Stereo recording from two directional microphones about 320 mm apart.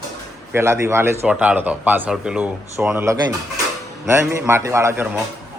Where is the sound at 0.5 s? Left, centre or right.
Centre.